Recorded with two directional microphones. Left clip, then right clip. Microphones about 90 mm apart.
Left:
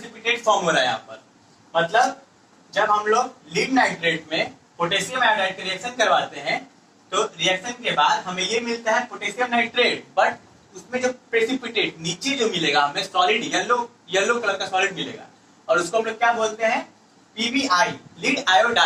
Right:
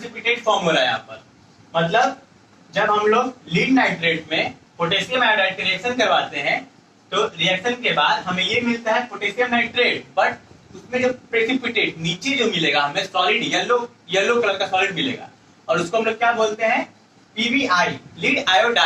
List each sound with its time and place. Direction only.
0.0 s a man's voice: 35° right (ahead or behind)